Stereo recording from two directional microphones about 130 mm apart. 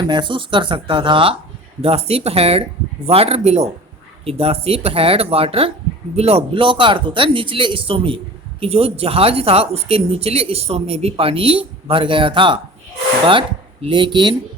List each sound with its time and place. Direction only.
0.0 s speech: 35° right (ahead or behind)
13.8 s speech: 35° right (ahead or behind)